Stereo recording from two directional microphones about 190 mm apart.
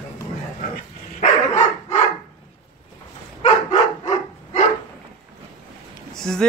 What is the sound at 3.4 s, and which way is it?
Dog, 35° left (ahead or behind).